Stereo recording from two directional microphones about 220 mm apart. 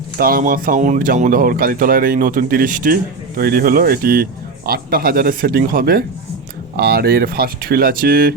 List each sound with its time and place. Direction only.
0.2 s speech: 40° right (ahead or behind)